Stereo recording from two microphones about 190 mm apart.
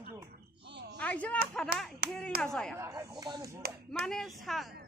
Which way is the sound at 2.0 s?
55° right (ahead or behind).